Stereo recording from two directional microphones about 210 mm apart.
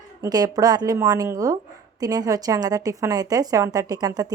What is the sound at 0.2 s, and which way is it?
A woman's voice, 20° right (ahead or behind).